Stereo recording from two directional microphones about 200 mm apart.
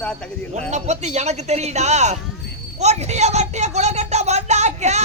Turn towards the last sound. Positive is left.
turn(degrees=-35)  # may be behind; listen again after turning